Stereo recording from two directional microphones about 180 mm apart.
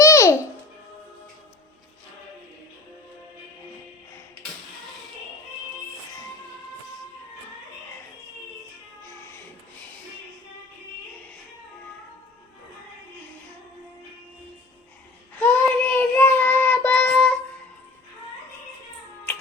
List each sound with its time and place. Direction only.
0.0 s babbling: 15° left (ahead or behind)
15.4 s child singing: 10° left (ahead or behind)